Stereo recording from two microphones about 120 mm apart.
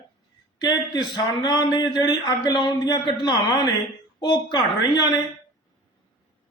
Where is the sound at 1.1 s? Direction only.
35° left (ahead or behind).